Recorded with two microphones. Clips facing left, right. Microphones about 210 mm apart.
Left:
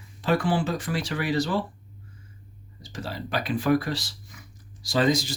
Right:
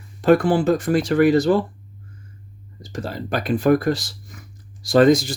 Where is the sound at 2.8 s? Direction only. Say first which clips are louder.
Right 6 dB; 45° right (ahead or behind).